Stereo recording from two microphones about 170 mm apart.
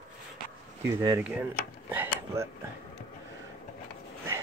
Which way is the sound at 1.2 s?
10° right (ahead or behind).